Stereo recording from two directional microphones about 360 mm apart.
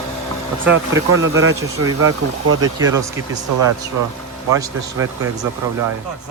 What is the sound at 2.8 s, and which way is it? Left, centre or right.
Speech, centre.